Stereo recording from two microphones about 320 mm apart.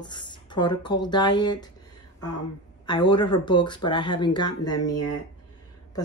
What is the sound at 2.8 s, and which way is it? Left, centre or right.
Speech, centre.